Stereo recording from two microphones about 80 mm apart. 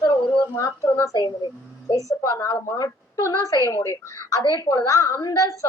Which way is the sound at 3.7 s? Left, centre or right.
Left.